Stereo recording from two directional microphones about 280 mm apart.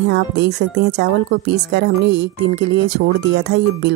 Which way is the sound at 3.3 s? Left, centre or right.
Right.